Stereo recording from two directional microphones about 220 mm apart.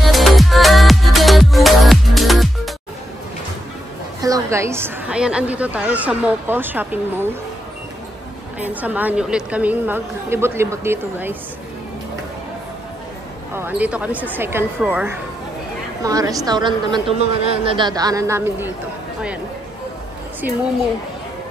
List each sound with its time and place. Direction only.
0.0 s music: centre (ahead or behind)
4.2 s a woman's voice: 15° right (ahead or behind)
8.5 s a woman's voice: 5° right (ahead or behind)
13.6 s a woman's voice: 5° right (ahead or behind)